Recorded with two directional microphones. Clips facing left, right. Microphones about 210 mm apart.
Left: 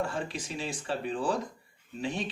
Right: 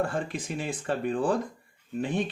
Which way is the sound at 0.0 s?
50° right (ahead or behind).